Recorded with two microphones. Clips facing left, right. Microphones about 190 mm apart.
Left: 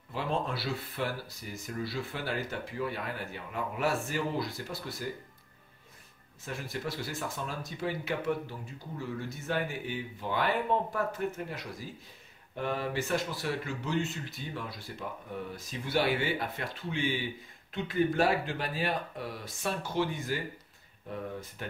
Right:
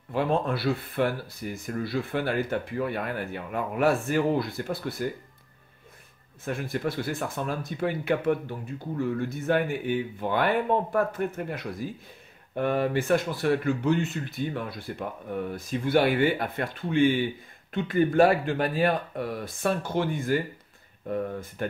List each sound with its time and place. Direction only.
0.1 s speech: 55° right (ahead or behind)
6.4 s speech: 55° right (ahead or behind)